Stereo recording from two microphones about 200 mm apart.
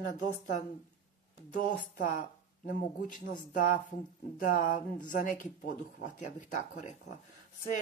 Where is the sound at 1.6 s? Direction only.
40° left (ahead or behind).